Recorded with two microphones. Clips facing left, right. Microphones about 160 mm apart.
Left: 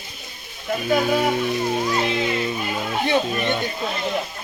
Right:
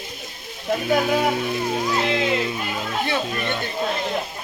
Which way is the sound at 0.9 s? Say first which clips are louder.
Left 1 dB; 5° right (ahead or behind).